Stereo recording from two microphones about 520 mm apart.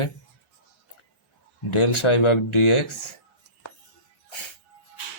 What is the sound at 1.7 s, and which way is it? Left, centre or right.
Speech, left.